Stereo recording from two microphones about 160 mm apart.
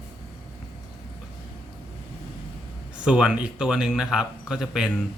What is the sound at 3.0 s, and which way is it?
Speech, 5° right (ahead or behind).